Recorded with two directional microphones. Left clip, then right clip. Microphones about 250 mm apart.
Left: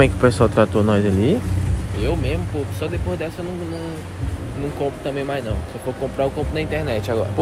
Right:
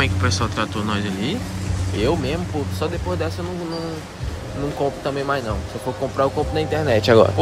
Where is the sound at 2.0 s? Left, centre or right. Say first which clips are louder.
Right 3 dB; right.